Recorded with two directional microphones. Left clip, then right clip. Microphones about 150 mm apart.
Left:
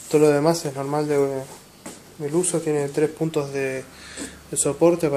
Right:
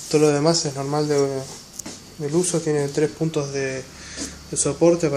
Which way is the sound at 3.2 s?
20° left (ahead or behind).